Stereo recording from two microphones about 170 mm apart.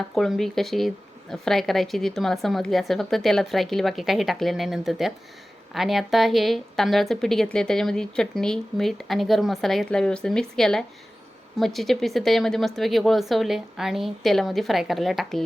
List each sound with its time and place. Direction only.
0.1 s speech: centre (ahead or behind)